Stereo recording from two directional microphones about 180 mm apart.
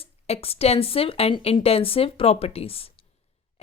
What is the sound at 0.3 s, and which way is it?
Speech, 35° left (ahead or behind).